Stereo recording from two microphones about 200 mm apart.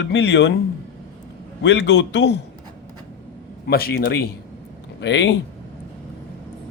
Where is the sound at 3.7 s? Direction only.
50° left (ahead or behind).